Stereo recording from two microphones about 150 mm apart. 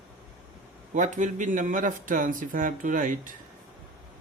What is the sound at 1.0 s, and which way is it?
A man's voice, 55° right (ahead or behind).